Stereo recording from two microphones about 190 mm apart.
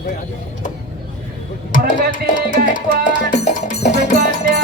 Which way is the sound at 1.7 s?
45° left (ahead or behind).